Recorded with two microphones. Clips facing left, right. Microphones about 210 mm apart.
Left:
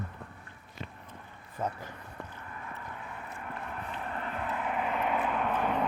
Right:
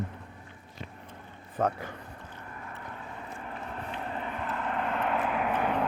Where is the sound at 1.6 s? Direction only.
70° right (ahead or behind).